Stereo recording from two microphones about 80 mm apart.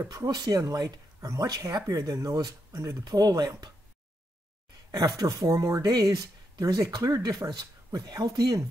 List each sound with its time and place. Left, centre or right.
0.0 s speech: right
4.9 s speech: right